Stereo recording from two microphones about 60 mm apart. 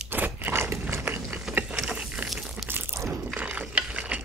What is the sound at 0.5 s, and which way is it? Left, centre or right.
Biting, right.